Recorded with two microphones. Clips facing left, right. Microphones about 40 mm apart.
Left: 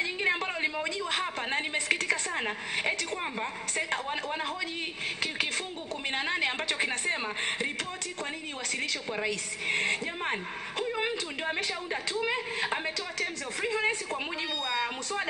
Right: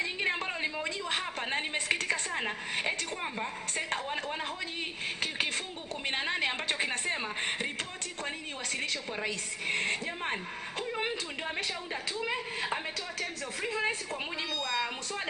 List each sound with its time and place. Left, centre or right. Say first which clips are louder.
0.0 s a sound: left 3 dB; left
1.5 s a woman's voice: left 1 dB; left
6.0 s a woman's voice: left 1 dB; left
8.8 s a woman's voice: left 4 dB; left
11.0 s speech: left 2 dB; left